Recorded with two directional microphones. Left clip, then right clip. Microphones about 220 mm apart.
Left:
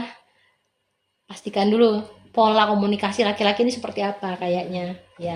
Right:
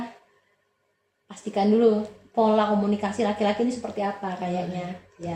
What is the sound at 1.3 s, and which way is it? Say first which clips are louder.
Speech: left 2 dB; 50° left (ahead or behind).